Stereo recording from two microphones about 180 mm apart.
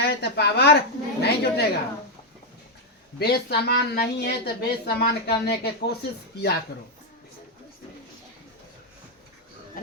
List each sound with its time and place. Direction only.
0.0 s a woman's voice: 65° left (ahead or behind)
3.2 s a woman's voice: 60° left (ahead or behind)